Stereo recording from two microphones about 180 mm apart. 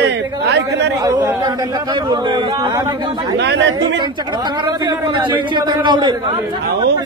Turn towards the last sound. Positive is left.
turn(degrees=-25)  # may be behind; listen again after turning